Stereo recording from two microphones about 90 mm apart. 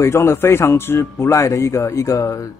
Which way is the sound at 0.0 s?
30° left (ahead or behind).